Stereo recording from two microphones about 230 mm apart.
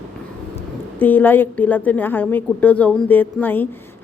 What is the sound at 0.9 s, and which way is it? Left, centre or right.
A woman's voice, centre.